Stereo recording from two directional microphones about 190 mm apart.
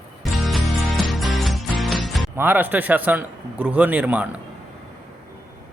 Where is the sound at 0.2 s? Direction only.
Centre (ahead or behind).